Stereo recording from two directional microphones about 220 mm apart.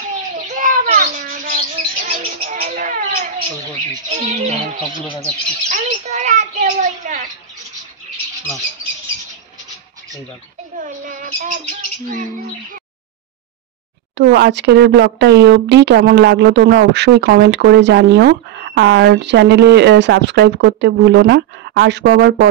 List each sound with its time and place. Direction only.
0.6 s bird: 40° right (ahead or behind)
4.1 s speech: 35° right (ahead or behind)
5.7 s speech: 35° right (ahead or behind)
10.8 s bird: 35° right (ahead or behind)
14.1 s speech: 50° right (ahead or behind)